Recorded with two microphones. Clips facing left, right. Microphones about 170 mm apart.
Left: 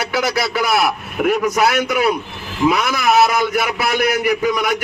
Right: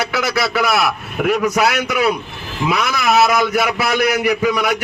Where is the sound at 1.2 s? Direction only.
50° left (ahead or behind).